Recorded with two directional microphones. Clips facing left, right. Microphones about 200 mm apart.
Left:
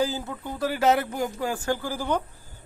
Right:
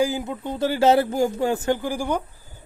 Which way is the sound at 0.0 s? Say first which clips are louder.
Right 4 dB; 15° right (ahead or behind).